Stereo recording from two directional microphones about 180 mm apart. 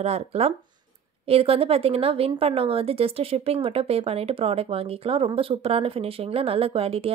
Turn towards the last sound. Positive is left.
turn(degrees=-35)  # may be behind; listen again after turning